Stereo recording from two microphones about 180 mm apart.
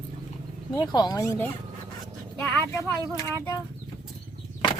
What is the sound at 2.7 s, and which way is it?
Speech, 15° left (ahead or behind).